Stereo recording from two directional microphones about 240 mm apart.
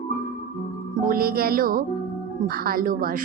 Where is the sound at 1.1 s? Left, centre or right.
Right.